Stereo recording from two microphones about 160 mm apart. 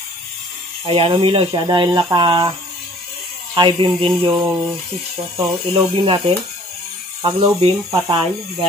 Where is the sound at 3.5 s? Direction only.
30° right (ahead or behind).